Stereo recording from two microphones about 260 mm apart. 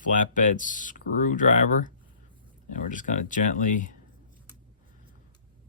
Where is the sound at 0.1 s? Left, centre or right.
Left.